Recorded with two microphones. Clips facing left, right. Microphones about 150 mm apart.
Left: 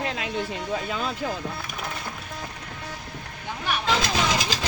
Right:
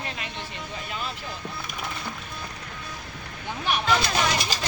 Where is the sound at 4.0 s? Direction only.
90° left.